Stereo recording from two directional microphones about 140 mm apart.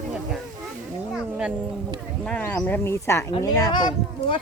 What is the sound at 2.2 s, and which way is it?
Speech, 5° left (ahead or behind).